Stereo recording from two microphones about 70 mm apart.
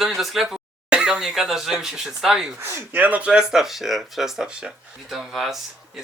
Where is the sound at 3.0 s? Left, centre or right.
Centre.